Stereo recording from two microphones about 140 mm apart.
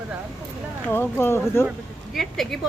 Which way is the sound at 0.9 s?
15° left (ahead or behind).